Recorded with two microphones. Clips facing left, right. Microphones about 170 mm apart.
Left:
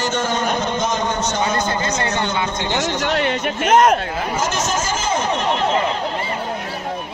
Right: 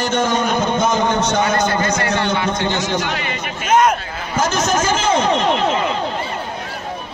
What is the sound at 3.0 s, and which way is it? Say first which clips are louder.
Speech: left 5 dB; 60° left (ahead or behind).